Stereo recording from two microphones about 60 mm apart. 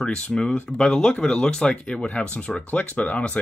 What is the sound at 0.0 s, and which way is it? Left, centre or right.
Speech, centre.